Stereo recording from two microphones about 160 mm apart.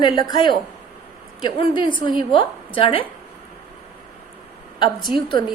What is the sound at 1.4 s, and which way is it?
A woman's voice, 25° left (ahead or behind).